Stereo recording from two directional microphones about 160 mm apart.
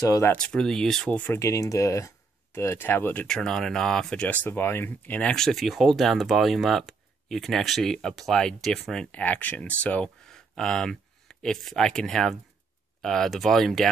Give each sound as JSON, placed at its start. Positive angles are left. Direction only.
{"t": 0.0, "sound": "speech", "side_deg": 20}
{"t": 0.4, "sound": "speech", "side_deg": 5}